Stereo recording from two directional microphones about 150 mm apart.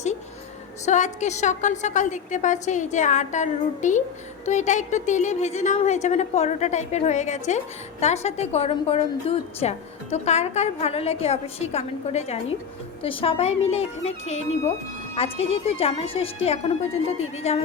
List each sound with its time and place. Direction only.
0.9 s a woman's voice: 55° left (ahead or behind)